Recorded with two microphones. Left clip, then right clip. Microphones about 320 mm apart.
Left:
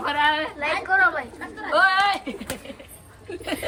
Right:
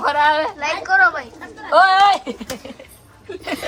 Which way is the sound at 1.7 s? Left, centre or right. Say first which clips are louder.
Right 7 dB; centre.